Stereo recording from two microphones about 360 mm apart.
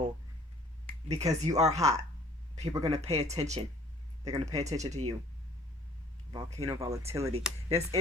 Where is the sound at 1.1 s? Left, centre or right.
Centre.